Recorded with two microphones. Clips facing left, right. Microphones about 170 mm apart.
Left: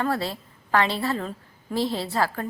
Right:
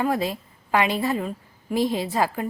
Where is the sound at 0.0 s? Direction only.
15° right (ahead or behind).